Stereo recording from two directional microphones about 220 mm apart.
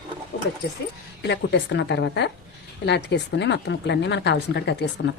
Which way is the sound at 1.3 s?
50° left (ahead or behind).